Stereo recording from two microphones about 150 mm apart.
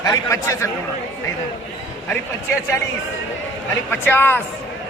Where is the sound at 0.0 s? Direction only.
20° left (ahead or behind).